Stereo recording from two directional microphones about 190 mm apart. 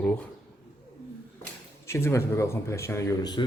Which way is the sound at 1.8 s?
15° left (ahead or behind).